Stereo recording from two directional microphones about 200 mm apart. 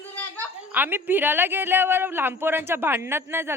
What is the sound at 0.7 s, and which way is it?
A man's voice, 10° right (ahead or behind).